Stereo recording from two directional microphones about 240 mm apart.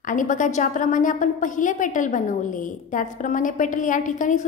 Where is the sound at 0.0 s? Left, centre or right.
Left.